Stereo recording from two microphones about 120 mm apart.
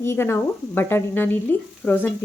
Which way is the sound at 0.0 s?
20° left (ahead or behind).